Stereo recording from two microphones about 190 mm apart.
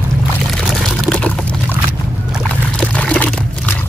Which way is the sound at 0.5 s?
Centre (ahead or behind).